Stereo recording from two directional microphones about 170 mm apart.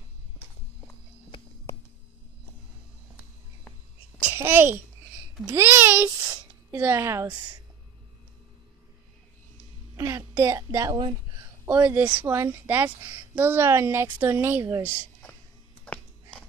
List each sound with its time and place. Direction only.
4.2 s a child's voice: 10° right (ahead or behind)
9.9 s a woman's voice: 20° right (ahead or behind)
11.9 s a woman's voice: 5° right (ahead or behind)
15.9 s a sound: 5° left (ahead or behind)